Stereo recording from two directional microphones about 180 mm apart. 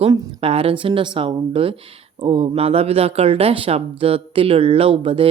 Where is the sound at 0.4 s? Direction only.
30° right (ahead or behind).